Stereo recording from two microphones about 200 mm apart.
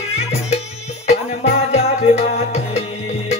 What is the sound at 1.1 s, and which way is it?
Music, 35° left (ahead or behind).